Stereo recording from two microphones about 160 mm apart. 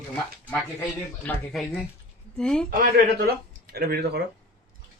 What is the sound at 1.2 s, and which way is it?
Speech, 5° left (ahead or behind).